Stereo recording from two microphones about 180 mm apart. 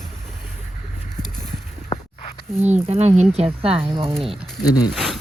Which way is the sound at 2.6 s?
40° right (ahead or behind).